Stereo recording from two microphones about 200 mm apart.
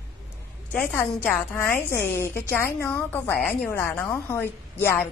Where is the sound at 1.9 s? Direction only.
55° left (ahead or behind).